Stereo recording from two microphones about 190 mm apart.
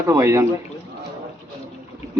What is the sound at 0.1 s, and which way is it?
Speech, 15° right (ahead or behind).